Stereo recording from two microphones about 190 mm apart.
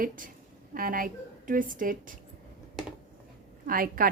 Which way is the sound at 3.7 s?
50° right (ahead or behind).